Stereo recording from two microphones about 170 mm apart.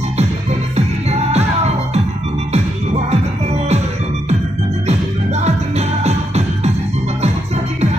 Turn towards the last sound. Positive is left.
turn(degrees=-40)  # may be behind; listen again after turning